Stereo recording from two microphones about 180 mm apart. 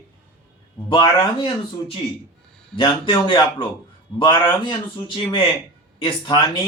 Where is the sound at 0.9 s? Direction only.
30° left (ahead or behind).